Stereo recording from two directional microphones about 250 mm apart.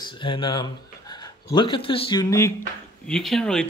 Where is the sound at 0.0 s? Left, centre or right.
Centre.